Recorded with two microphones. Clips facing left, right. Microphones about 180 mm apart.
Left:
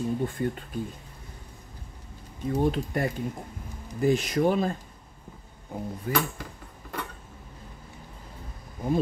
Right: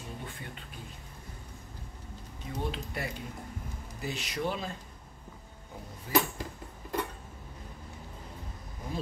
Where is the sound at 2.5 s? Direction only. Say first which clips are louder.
Left 10 dB; 50° left (ahead or behind).